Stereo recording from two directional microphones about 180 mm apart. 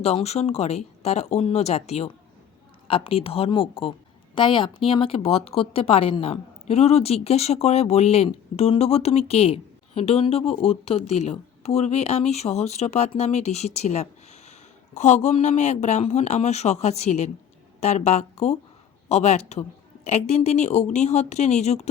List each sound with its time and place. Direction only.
0.0 s a woman's voice: 35° left (ahead or behind)